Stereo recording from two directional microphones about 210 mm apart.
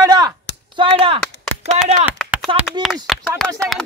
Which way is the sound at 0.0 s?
20° right (ahead or behind).